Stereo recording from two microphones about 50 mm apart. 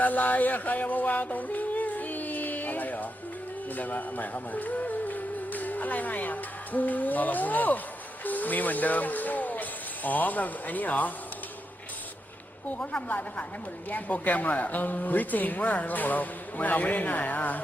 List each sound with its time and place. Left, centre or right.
0.0 s yodeling: left
3.8 s speech: left
12.6 s speech: left